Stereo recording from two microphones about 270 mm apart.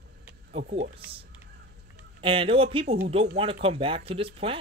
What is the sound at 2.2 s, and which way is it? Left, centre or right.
Speech, centre.